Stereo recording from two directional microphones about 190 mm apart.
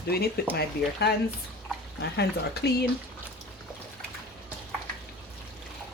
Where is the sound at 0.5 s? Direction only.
60° left (ahead or behind).